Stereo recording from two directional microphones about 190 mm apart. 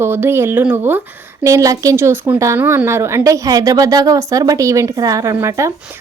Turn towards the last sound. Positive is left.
turn(degrees=-15)  # may be behind; listen again after turning